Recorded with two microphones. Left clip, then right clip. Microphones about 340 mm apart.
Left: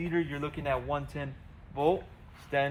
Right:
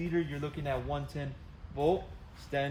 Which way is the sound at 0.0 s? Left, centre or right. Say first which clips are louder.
Left 2 dB; centre.